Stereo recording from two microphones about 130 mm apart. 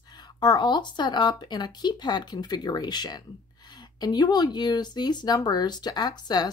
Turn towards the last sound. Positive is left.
turn(degrees=30)  # may be behind; listen again after turning